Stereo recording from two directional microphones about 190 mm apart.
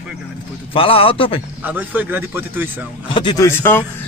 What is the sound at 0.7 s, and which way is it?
Speech, 30° left (ahead or behind).